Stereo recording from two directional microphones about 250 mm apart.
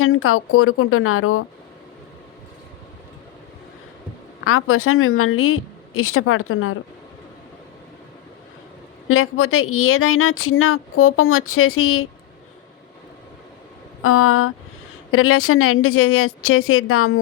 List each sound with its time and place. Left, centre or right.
0.0 s speech: left
4.4 s speech: left
9.0 s speech: left
14.0 s speech: left